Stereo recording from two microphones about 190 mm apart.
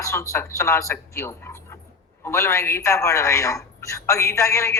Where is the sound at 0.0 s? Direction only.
15° left (ahead or behind).